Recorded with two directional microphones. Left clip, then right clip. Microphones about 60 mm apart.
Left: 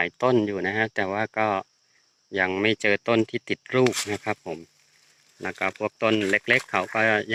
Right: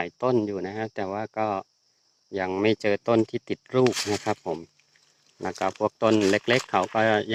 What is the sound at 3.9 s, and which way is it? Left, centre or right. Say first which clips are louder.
Speech: right 1 dB; right.